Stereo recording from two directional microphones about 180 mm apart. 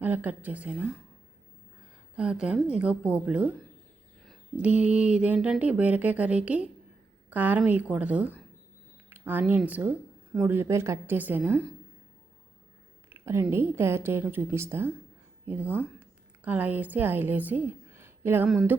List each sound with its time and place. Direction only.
0.0 s speech: 10° right (ahead or behind)
2.1 s speech: 5° right (ahead or behind)
13.1 s a woman's voice: 15° right (ahead or behind)